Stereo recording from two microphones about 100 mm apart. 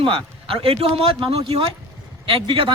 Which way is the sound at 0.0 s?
60° right (ahead or behind).